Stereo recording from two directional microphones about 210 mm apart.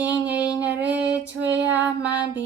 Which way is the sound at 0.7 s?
5° right (ahead or behind).